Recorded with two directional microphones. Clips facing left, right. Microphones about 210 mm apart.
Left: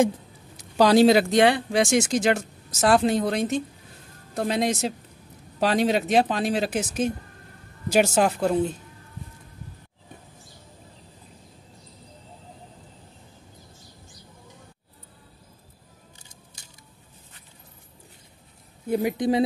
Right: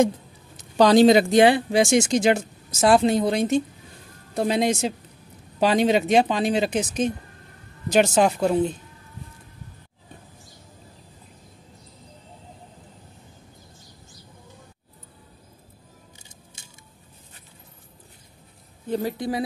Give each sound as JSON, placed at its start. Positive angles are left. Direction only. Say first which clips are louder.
{"t": 0.6, "sound": "speech", "louder": "right 2 dB", "side_deg": 5}
{"t": 16.6, "sound": "a sound", "louder": "right 1 dB", "side_deg": -25}
{"t": 18.9, "sound": "a woman's voice", "louder": "left 3 dB", "side_deg": 10}